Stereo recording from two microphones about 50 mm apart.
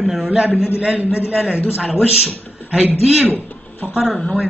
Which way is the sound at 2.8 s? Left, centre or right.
Right.